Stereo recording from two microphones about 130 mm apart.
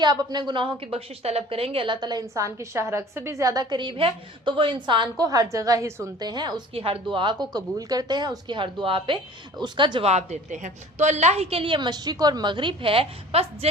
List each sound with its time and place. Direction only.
0.0 s a woman's voice: 30° right (ahead or behind)
6.7 s a woman's voice: 45° right (ahead or behind)
10.1 s a woman's voice: 60° right (ahead or behind)